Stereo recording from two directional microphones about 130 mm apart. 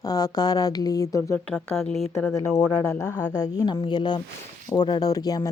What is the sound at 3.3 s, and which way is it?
Speech, 30° left (ahead or behind).